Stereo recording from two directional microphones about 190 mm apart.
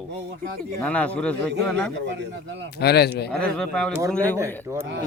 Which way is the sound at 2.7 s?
60° left (ahead or behind).